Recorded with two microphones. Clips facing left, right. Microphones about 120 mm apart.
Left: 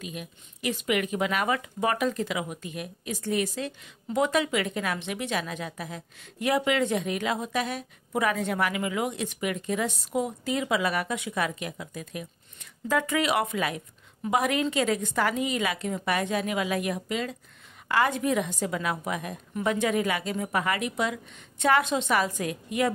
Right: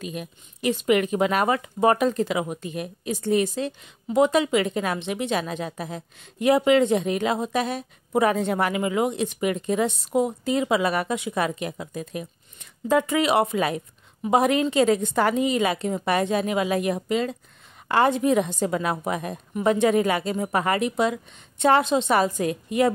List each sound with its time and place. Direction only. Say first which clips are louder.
0.0 s a woman's voice: right 5 dB; 40° right (ahead or behind)